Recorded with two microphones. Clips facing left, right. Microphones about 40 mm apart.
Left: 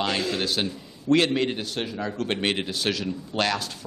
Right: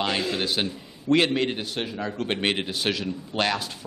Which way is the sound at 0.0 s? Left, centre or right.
Centre.